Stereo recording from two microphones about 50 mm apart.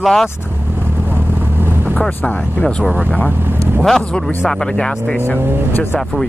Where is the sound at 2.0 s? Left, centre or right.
Left.